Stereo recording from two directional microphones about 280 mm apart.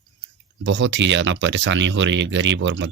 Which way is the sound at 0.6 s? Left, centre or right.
Right.